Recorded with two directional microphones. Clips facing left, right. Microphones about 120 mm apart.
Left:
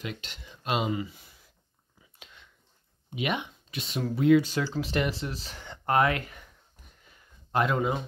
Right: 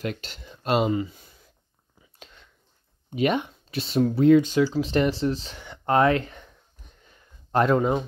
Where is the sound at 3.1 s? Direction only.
35° right (ahead or behind).